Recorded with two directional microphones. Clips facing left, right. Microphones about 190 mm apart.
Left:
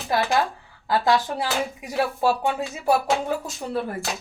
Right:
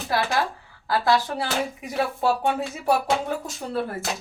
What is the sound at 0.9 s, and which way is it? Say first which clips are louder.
Speech: left 1 dB; 15° left (ahead or behind).